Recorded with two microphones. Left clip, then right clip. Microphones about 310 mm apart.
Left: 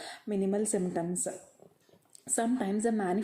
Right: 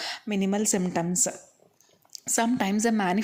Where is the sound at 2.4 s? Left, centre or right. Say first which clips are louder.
Right 5 dB; right.